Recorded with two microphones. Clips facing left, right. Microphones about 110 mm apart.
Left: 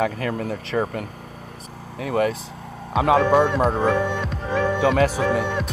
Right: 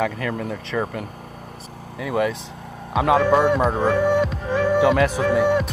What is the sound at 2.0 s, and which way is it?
Speech, 45° left (ahead or behind).